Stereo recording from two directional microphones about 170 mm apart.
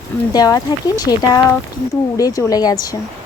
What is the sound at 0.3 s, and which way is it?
Speech, 20° left (ahead or behind).